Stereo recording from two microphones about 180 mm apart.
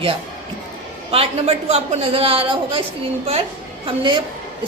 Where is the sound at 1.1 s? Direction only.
35° right (ahead or behind).